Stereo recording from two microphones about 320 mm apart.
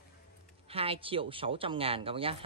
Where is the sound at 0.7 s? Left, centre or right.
Centre.